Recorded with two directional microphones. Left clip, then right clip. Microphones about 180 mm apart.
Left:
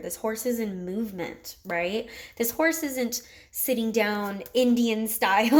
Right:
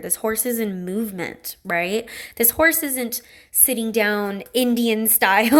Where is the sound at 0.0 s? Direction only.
25° right (ahead or behind).